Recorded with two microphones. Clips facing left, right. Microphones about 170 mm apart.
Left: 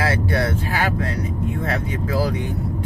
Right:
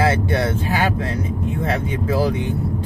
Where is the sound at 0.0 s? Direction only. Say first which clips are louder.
Right 3 dB; 25° right (ahead or behind).